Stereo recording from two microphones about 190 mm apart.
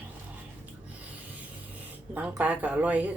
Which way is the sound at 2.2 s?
10° right (ahead or behind).